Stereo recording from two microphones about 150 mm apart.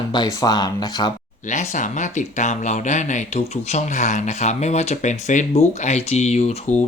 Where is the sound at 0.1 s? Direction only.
25° left (ahead or behind).